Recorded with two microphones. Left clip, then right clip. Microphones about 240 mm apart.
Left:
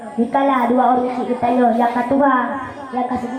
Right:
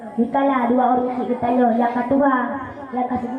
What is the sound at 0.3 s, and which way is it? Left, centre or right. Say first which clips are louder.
A woman's voice: left 3 dB; centre.